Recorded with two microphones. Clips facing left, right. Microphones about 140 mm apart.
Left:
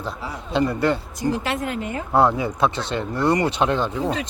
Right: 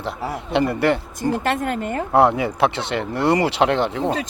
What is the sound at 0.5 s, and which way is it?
Speech, 65° right (ahead or behind).